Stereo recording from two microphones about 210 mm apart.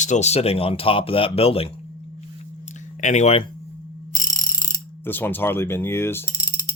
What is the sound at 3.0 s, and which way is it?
Speech, 35° left (ahead or behind).